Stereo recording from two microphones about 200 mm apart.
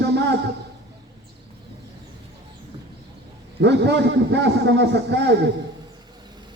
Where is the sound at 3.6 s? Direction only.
60° right (ahead or behind).